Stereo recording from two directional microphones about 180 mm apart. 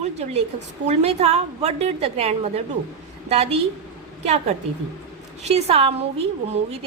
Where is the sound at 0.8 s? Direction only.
35° right (ahead or behind).